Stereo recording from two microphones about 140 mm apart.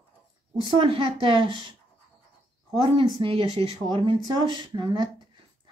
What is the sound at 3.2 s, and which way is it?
A woman's voice, 40° right (ahead or behind).